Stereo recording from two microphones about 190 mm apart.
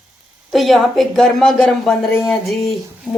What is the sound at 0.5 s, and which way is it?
A woman's voice, centre (ahead or behind).